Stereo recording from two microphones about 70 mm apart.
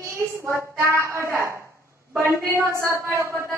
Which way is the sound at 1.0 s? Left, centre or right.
Right.